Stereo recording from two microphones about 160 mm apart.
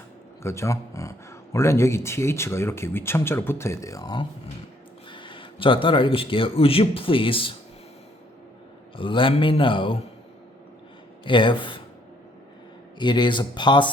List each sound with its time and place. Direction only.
0.4 s speech: 15° left (ahead or behind); by 7.5 s 35° left (ahead or behind)
9.0 s speech: 30° left (ahead or behind)
11.3 s speech: 30° left (ahead or behind)
13.0 s speech: 30° left (ahead or behind)